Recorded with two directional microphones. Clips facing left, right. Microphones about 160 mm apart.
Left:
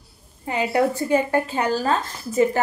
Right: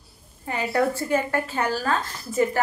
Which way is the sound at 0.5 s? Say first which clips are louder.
Left 3 dB; 15° left (ahead or behind).